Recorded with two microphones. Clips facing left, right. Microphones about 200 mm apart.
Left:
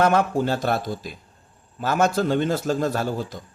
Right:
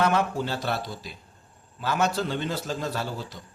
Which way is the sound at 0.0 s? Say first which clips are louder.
Left 5 dB; 45° left (ahead or behind).